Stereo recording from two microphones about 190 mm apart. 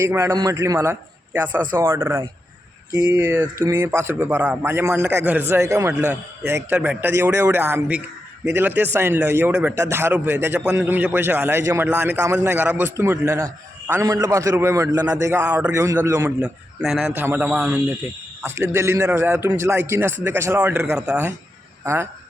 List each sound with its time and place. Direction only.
0.0 s a man's voice: 10° right (ahead or behind)
16.4 s a man's voice: centre (ahead or behind)